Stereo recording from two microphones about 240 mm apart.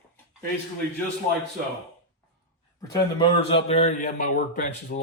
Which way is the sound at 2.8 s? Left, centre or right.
Centre.